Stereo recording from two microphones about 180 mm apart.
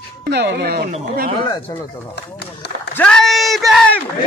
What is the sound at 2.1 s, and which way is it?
Speech, 70° left (ahead or behind).